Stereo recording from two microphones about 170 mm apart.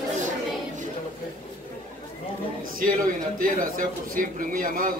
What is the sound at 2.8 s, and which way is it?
A man's voice, 55° right (ahead or behind).